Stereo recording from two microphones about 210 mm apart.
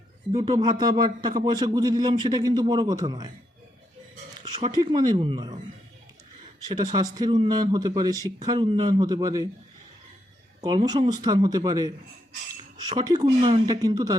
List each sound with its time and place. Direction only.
0.5 s a man's voice: 20° right (ahead or behind)
4.7 s speech: 20° right (ahead or behind)
6.6 s speech: 20° right (ahead or behind)
10.6 s a man's voice: 20° right (ahead or behind)
13.0 s a man's voice: 20° right (ahead or behind)